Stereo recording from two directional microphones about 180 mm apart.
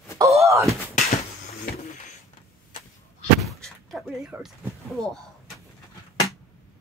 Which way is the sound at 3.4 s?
Centre (ahead or behind).